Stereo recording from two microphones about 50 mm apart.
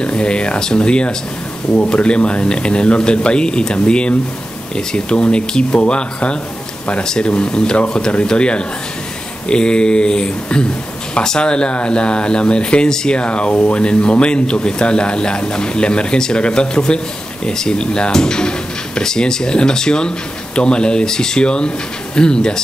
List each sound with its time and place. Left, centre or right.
0.0 s speech: centre